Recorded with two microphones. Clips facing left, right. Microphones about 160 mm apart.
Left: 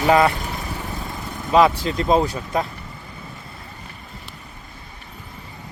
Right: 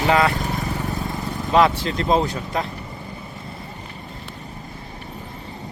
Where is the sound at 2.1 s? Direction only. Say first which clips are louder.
Left 1 dB; 10° left (ahead or behind).